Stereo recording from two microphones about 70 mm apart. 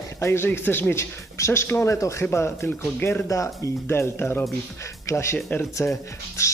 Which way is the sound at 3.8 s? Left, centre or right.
Left.